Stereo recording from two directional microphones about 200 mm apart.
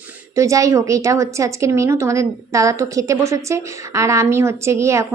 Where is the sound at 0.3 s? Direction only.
15° right (ahead or behind).